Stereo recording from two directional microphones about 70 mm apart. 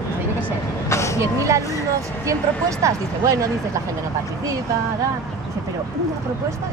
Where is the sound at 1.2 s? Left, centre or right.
Right.